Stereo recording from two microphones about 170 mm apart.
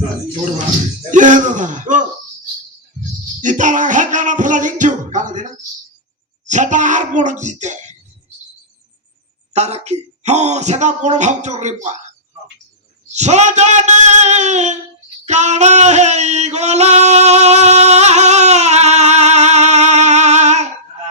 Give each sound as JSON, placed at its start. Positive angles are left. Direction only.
{"t": 1.1, "sound": "a sound", "side_deg": -45}
{"t": 3.4, "sound": "speech", "side_deg": -50}
{"t": 9.5, "sound": "speech", "side_deg": -40}
{"t": 13.1, "sound": "speech", "side_deg": -40}
{"t": 15.3, "sound": "male singing", "side_deg": -45}